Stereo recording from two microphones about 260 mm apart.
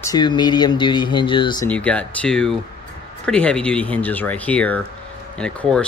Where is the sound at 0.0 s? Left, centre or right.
Centre.